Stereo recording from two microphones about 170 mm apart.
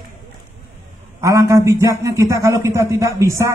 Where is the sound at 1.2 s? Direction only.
20° right (ahead or behind).